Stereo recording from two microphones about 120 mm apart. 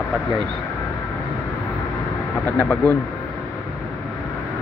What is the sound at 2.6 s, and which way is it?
Speech, 15° left (ahead or behind).